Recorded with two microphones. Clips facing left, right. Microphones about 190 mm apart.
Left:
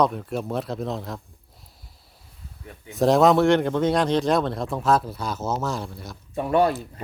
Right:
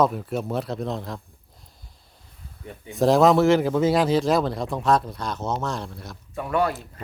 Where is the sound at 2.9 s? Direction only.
Centre (ahead or behind).